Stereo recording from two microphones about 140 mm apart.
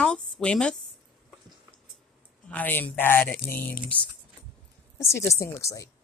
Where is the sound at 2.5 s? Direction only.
10° left (ahead or behind).